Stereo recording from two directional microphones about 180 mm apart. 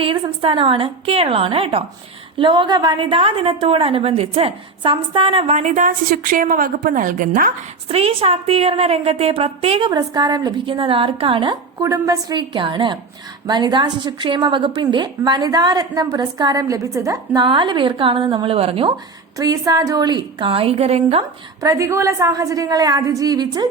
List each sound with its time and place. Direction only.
0.0 s a woman's voice: 30° right (ahead or behind); by 7.5 s 50° right (ahead or behind)
7.9 s a woman's voice: 35° right (ahead or behind)
19.4 s a woman's voice: 20° right (ahead or behind)
21.6 s a woman's voice: 20° right (ahead or behind)